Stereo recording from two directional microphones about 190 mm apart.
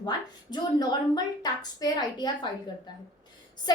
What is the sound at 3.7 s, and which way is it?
Speech, 20° left (ahead or behind).